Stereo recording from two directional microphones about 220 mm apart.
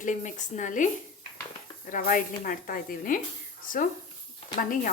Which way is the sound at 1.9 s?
40° left (ahead or behind).